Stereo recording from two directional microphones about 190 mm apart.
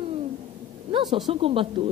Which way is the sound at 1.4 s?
30° right (ahead or behind).